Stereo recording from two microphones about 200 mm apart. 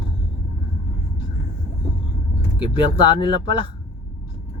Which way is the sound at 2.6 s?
25° left (ahead or behind).